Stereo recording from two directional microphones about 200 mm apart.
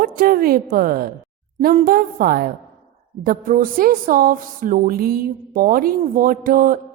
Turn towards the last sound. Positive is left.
turn(degrees=-45)  # may be behind; listen again after turning